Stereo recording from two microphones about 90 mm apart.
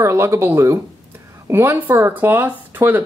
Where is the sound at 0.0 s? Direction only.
30° right (ahead or behind).